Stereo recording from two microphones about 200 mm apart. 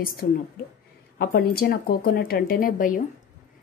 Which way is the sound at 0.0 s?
45° left (ahead or behind).